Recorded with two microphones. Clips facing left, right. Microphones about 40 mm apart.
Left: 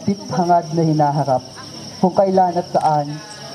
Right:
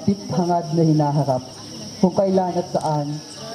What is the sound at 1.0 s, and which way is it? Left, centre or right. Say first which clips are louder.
Speech: left 4 dB; left.